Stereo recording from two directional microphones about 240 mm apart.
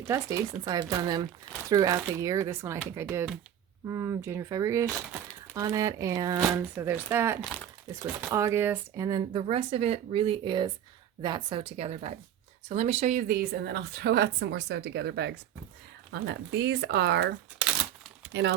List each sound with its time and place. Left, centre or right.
0.1 s speech: centre; by 18.5 s right